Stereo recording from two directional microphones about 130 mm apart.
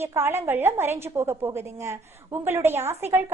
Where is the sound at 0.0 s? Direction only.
20° right (ahead or behind).